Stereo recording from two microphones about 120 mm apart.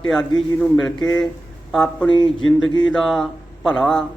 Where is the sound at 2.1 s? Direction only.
40° left (ahead or behind).